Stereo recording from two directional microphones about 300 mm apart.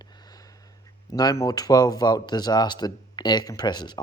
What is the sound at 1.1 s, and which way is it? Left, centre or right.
Speech, centre.